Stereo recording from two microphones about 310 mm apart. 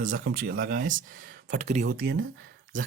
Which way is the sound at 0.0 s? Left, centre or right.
Right.